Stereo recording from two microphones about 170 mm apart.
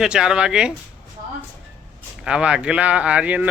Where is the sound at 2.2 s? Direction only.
5° right (ahead or behind).